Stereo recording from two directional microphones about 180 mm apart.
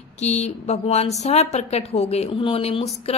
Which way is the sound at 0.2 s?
40° left (ahead or behind).